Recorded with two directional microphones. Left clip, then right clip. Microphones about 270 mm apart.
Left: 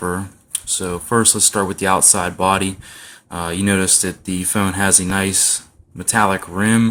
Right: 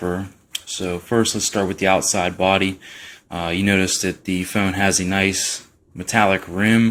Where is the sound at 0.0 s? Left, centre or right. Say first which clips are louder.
Left 2 dB; centre.